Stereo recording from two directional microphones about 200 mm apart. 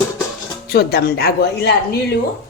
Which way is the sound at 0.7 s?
55° left (ahead or behind).